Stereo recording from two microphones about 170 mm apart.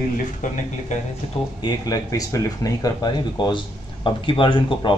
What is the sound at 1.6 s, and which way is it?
Speech, 20° left (ahead or behind).